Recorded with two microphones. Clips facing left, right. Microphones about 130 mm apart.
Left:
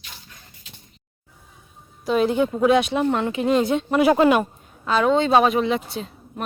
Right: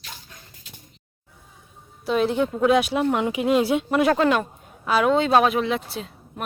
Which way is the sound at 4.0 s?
10° left (ahead or behind).